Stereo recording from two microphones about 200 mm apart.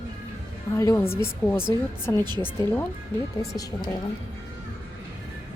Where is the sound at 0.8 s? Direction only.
15° left (ahead or behind).